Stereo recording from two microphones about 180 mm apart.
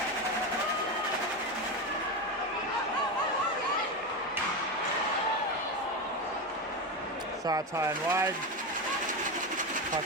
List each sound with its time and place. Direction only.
7.4 s speech: 20° right (ahead or behind)